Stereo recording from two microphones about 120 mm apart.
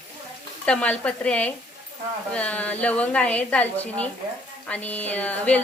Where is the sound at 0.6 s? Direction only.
10° left (ahead or behind).